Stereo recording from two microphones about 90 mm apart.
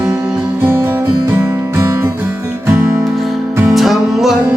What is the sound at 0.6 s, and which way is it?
Music, 25° right (ahead or behind).